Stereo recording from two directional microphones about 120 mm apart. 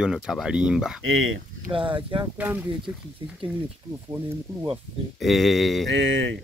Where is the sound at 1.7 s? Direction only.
45° right (ahead or behind).